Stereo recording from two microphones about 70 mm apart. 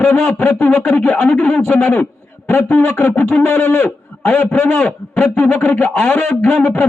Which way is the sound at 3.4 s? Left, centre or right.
Left.